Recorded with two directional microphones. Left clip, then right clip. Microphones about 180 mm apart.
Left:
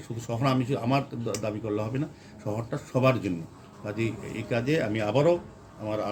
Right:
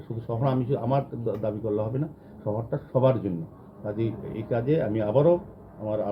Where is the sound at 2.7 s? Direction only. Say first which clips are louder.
Right 2 dB; 15° left (ahead or behind).